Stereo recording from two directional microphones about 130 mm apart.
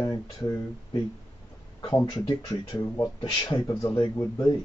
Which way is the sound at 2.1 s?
35° left (ahead or behind).